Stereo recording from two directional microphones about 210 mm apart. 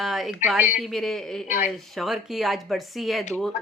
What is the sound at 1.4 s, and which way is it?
Speech, 35° left (ahead or behind).